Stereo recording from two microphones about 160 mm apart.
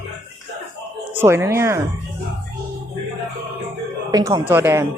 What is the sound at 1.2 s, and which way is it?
Speech, 15° right (ahead or behind).